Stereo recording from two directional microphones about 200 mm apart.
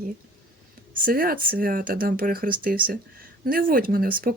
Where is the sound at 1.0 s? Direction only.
45° right (ahead or behind).